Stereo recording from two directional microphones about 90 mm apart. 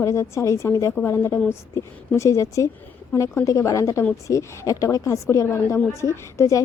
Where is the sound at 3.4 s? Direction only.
40° left (ahead or behind).